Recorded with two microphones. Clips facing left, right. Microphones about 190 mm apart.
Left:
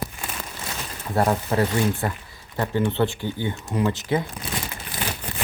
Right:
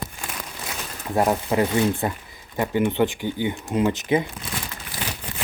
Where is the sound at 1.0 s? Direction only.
15° right (ahead or behind).